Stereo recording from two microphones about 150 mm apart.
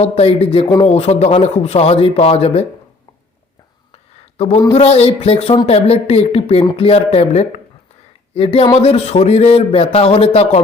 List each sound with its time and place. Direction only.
0.0 s speech: 45° left (ahead or behind)
4.4 s speech: 45° left (ahead or behind)